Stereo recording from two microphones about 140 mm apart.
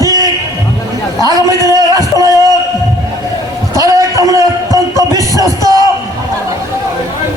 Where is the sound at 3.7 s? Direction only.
25° right (ahead or behind).